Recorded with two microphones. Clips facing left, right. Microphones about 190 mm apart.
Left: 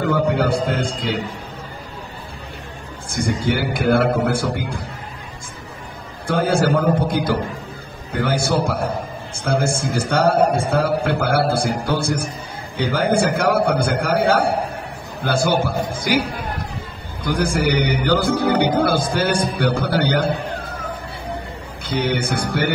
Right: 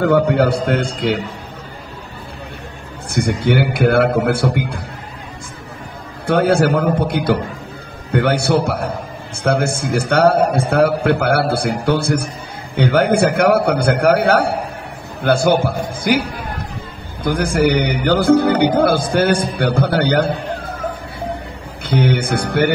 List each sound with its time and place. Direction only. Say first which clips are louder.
0.0 s a man's voice: right 5 dB; 65° right (ahead or behind)
3.1 s a man's voice: right 4 dB; 65° right (ahead or behind)
6.2 s a man's voice: right 4 dB; 65° right (ahead or behind)
21.8 s a man's voice: right 4 dB; 55° right (ahead or behind)